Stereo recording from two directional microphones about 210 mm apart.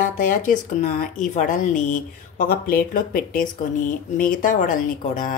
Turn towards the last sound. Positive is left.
turn(degrees=40)  # may be behind; listen again after turning